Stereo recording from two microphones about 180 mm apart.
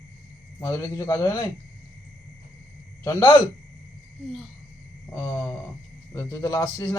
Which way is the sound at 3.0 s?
15° left (ahead or behind).